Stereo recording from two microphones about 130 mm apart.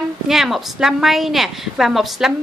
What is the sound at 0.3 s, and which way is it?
A woman's voice, centre (ahead or behind).